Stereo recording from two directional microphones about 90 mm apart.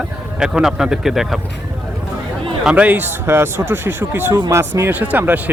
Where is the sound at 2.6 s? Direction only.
15° right (ahead or behind).